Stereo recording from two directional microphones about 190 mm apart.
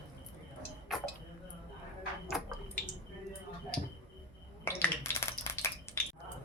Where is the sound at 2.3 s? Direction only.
Centre (ahead or behind).